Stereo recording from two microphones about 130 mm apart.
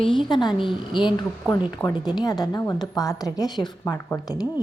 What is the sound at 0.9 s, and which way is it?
A woman's voice, 35° left (ahead or behind).